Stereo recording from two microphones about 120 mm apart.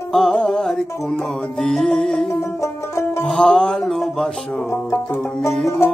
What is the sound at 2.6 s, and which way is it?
Banjo, 25° left (ahead or behind).